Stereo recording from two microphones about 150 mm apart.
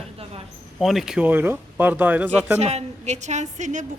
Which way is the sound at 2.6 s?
45° right (ahead or behind).